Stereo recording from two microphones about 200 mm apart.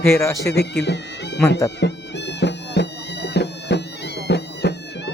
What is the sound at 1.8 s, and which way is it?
Music, 60° left (ahead or behind).